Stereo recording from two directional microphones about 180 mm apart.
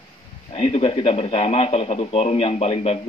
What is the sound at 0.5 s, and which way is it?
A man's voice, 35° left (ahead or behind).